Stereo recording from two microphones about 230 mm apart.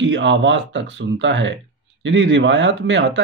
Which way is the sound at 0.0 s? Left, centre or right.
Right.